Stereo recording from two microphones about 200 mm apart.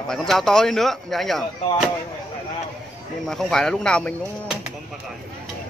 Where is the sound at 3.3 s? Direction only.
Centre (ahead or behind).